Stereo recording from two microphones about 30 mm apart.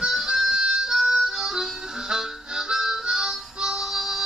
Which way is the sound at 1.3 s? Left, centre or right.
Centre.